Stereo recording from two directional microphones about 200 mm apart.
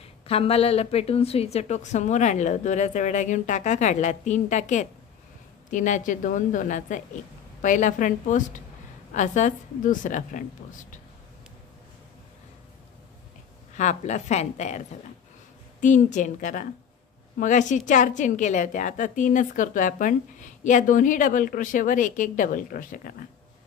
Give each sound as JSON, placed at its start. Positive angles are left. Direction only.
{"t": 0.0, "sound": "a woman's voice", "side_deg": 30}
{"t": 13.7, "sound": "a woman's voice", "side_deg": 35}